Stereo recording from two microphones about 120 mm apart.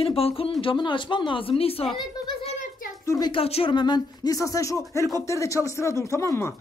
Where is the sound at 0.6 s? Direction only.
40° left (ahead or behind).